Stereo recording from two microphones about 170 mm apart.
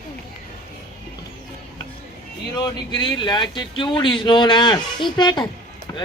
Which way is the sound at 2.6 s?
25° left (ahead or behind).